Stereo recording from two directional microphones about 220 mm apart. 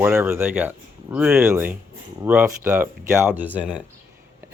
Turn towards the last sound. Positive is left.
turn(degrees=-5)  # may be behind; listen again after turning